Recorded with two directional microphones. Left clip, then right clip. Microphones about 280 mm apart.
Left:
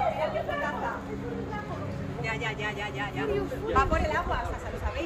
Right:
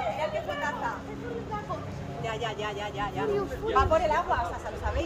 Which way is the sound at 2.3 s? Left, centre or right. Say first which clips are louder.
Even; right.